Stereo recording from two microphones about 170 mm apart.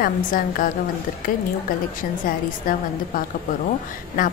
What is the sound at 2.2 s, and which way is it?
A woman's voice, 55° left (ahead or behind).